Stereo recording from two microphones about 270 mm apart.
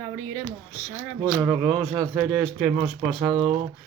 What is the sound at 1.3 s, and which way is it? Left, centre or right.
Speech, centre.